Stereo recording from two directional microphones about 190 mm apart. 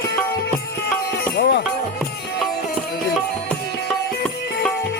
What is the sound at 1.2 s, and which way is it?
Music, 55° left (ahead or behind).